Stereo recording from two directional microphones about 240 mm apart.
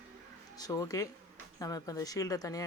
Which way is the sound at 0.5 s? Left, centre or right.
Centre.